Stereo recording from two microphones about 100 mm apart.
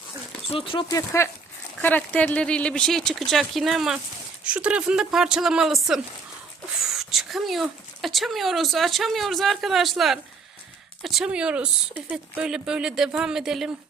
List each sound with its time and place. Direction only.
0.5 s speech: 60° left (ahead or behind)
0.9 s speech: 30° left (ahead or behind)
1.8 s speech: 15° left (ahead or behind); by 13.7 s 5° right (ahead or behind)